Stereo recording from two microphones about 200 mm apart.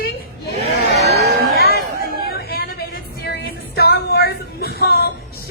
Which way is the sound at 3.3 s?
55° left (ahead or behind).